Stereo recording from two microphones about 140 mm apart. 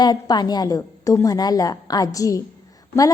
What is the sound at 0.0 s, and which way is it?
A woman's voice, 30° left (ahead or behind).